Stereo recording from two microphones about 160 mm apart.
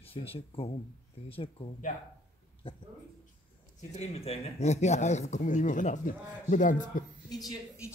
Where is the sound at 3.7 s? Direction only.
45° left (ahead or behind).